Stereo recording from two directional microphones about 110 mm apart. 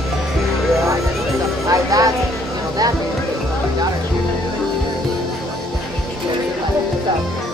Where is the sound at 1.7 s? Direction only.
30° right (ahead or behind).